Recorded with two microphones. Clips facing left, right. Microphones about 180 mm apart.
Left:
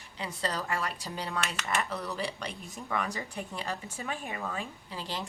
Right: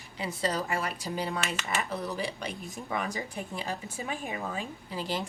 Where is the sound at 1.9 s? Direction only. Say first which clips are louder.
Right 2 dB; 25° right (ahead or behind).